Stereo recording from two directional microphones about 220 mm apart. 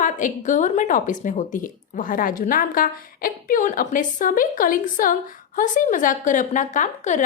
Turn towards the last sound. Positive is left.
turn(degrees=35)  # may be behind; listen again after turning